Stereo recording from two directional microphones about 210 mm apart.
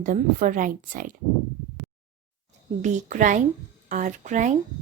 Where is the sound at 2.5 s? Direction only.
35° right (ahead or behind).